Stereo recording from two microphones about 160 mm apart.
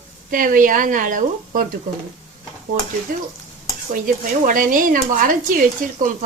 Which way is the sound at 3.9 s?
60° right (ahead or behind).